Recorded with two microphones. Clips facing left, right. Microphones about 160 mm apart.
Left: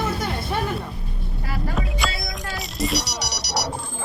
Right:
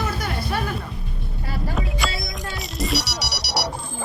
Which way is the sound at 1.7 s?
Centre (ahead or behind).